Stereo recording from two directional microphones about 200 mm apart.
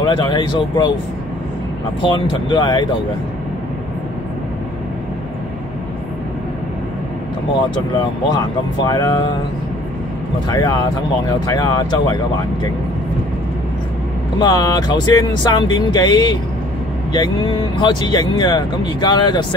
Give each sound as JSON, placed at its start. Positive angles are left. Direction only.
{"t": 0.0, "sound": "speech", "side_deg": 20}
{"t": 2.0, "sound": "speech", "side_deg": 20}
{"t": 8.8, "sound": "speech", "side_deg": 20}
{"t": 10.5, "sound": "speech", "side_deg": 20}
{"t": 14.4, "sound": "speech", "side_deg": 20}